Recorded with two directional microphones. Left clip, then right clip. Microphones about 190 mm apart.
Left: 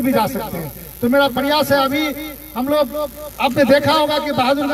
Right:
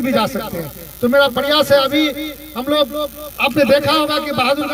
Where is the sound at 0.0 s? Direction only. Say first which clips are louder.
Even; 45° right (ahead or behind).